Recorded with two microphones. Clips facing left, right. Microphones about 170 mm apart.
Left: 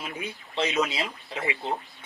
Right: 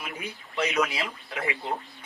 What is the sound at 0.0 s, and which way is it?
Speech, 25° left (ahead or behind).